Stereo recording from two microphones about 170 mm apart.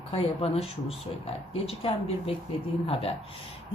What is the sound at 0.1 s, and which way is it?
Speech, 35° left (ahead or behind).